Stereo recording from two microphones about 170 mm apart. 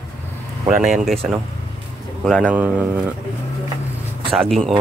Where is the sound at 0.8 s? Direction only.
Centre (ahead or behind).